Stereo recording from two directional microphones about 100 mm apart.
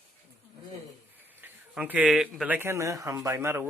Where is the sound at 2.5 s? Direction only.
30° right (ahead or behind).